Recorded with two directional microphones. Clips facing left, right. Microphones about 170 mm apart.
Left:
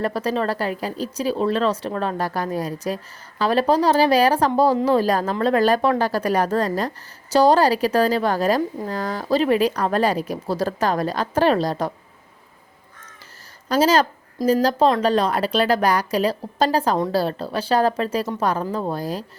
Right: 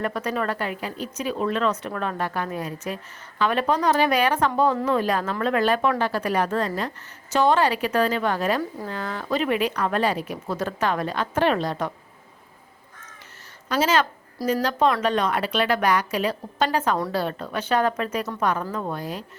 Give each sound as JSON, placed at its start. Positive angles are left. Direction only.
{"t": 0.0, "sound": "speech", "side_deg": 35}
{"t": 13.7, "sound": "speech", "side_deg": 35}